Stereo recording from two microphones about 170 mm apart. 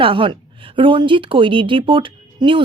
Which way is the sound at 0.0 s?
30° right (ahead or behind).